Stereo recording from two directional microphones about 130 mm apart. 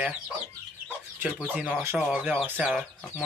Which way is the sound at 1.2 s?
10° right (ahead or behind).